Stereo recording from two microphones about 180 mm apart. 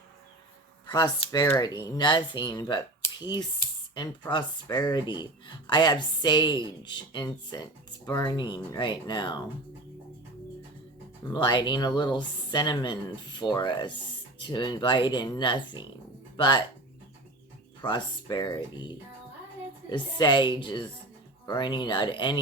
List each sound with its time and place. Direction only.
0.9 s speech: 25° left (ahead or behind)
11.3 s speech: 25° left (ahead or behind)
17.8 s speech: 25° left (ahead or behind)